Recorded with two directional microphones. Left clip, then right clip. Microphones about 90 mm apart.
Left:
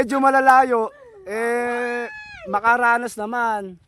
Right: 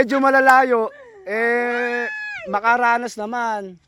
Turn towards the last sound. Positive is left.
turn(degrees=30)  # may be behind; listen again after turning